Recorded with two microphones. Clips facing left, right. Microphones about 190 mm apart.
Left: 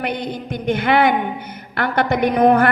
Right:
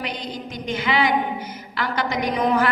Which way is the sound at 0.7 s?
60° left (ahead or behind).